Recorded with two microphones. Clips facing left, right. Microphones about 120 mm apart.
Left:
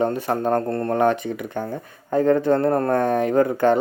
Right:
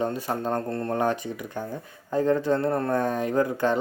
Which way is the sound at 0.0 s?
60° left (ahead or behind).